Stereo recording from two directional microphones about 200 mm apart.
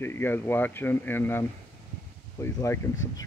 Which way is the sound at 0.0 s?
10° left (ahead or behind).